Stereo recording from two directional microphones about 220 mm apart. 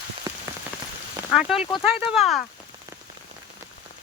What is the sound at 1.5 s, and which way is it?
Speech, 25° left (ahead or behind).